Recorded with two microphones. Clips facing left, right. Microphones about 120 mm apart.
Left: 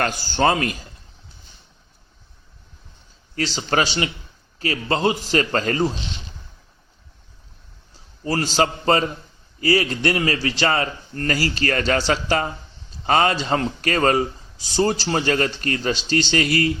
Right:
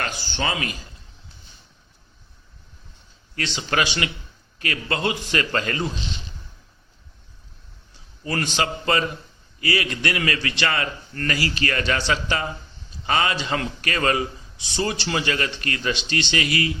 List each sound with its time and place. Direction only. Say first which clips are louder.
0.0 s a man's voice: left 8 dB; 45° left (ahead or behind)
3.3 s speech: left 3 dB; 35° left (ahead or behind)
8.2 s speech: left 5 dB; 30° left (ahead or behind)